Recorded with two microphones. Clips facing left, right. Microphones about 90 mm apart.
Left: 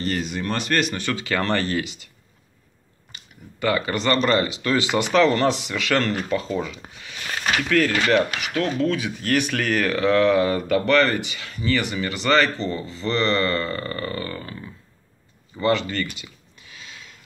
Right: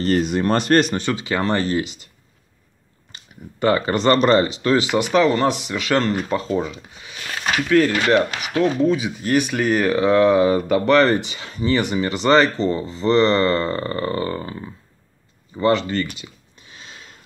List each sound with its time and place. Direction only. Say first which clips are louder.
0.0 s speech: right 7 dB; 45° right (ahead or behind)
1.0 s speech: right 2 dB; 20° right (ahead or behind)
3.1 s speech: right 4 dB; 30° right (ahead or behind)
5.1 s speech: right 1 dB; 15° right (ahead or behind)
15.9 s a sound: right 4 dB; 25° right (ahead or behind)